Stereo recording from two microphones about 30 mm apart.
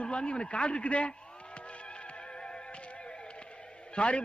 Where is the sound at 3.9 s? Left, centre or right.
Left.